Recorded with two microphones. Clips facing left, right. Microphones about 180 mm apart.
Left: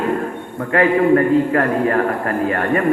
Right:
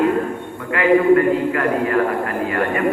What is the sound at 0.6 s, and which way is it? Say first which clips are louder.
A man's voice: left 1 dB; 40° left (ahead or behind).